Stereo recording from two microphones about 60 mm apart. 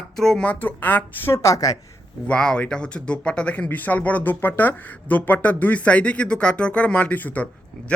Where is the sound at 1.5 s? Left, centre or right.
Left.